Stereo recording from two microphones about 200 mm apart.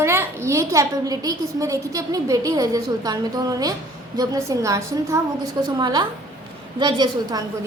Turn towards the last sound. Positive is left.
turn(degrees=-20)  # may be behind; listen again after turning